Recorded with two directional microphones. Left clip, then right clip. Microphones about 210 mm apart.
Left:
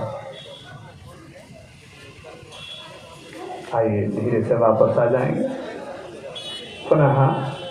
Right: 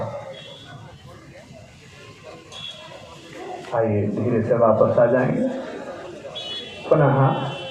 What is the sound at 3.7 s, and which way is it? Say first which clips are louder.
A man's voice: left 1 dB; 50° left (ahead or behind).